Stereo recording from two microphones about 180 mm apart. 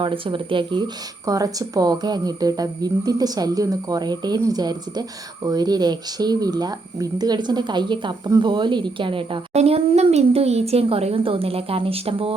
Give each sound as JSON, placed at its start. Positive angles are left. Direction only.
{"t": 0.0, "sound": "speech", "side_deg": -30}